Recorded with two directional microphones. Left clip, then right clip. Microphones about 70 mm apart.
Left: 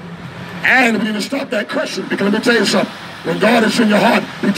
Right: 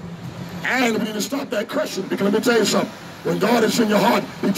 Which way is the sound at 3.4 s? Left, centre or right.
Right.